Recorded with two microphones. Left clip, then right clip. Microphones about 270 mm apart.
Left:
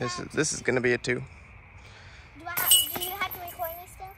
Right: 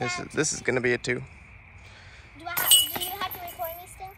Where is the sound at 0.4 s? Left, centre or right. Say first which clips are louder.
Even; centre.